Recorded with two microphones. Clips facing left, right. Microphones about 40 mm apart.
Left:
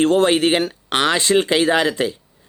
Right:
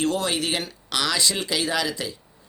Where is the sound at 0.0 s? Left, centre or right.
Left.